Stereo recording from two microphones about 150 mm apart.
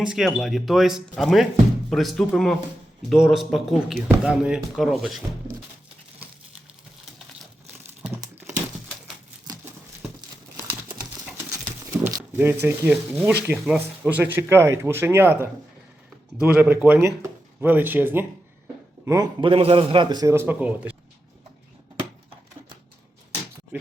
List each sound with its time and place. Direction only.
0.0 s speech: 5° right (ahead or behind)
12.3 s a man's voice: 15° right (ahead or behind)
19.4 s a man's voice: 35° right (ahead or behind); by 20.9 s 10° right (ahead or behind)